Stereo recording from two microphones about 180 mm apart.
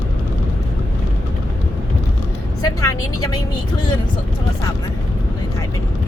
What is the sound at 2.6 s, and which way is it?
Vehicle, 20° left (ahead or behind).